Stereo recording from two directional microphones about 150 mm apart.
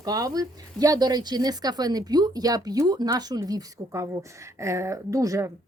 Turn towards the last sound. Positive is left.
turn(degrees=-20)  # may be behind; listen again after turning